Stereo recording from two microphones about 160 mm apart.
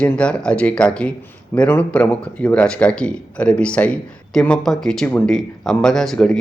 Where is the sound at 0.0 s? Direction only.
5° left (ahead or behind).